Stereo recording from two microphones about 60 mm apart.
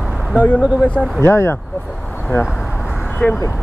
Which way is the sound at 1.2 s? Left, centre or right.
Left.